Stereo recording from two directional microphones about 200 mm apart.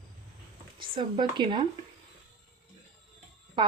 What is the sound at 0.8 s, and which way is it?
Speech, 25° right (ahead or behind).